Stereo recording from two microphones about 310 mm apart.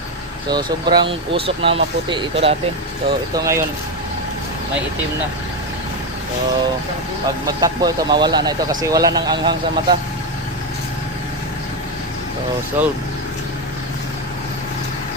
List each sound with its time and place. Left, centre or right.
0.5 s speech: centre
7.6 s speech: centre
12.8 s speech: centre